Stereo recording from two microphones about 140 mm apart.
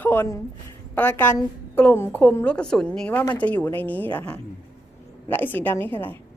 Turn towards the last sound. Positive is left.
turn(degrees=15)  # may be behind; listen again after turning